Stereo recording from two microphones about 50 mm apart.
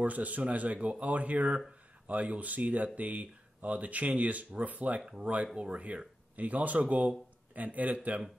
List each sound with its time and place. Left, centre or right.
0.0 s speech: right
5.0 s speech: centre